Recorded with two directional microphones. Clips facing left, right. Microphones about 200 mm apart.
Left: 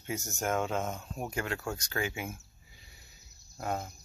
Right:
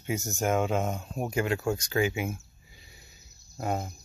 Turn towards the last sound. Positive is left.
turn(degrees=-20)  # may be behind; listen again after turning